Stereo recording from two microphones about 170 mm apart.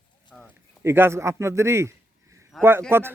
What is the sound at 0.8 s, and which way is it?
A man's voice, 15° right (ahead or behind).